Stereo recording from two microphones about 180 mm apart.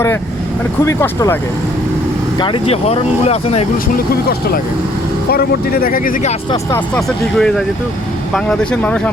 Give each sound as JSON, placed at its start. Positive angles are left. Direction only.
{"t": 0.9, "sound": "speech", "side_deg": 15}
{"t": 2.4, "sound": "speech", "side_deg": 30}
{"t": 3.9, "sound": "speech", "side_deg": 55}
{"t": 6.7, "sound": "speech", "side_deg": 5}